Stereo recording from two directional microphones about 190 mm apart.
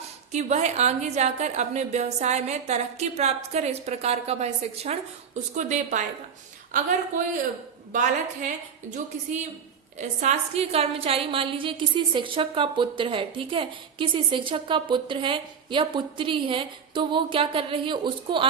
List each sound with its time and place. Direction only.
0.3 s a woman's voice: 35° right (ahead or behind)
7.9 s a woman's voice: 40° right (ahead or behind); by 18.4 s 25° right (ahead or behind)